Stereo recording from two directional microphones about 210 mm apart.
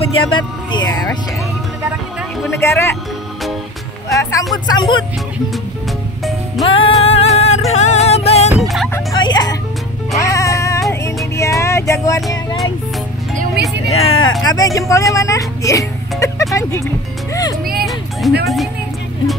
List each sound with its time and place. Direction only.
0.1 s speech: 25° left (ahead or behind)
2.6 s speech: 15° left (ahead or behind)
4.1 s speech: 15° left (ahead or behind)
6.6 s music: 25° left (ahead or behind)
8.9 s music: 20° left (ahead or behind)
11.3 s vehicle: 15° left (ahead or behind)
13.8 s speech: 80° left
14.4 s speech: 20° left (ahead or behind)
15.1 s music: 15° left (ahead or behind)
16.5 s speech: 15° left (ahead or behind)
18.2 s speech: centre (ahead or behind)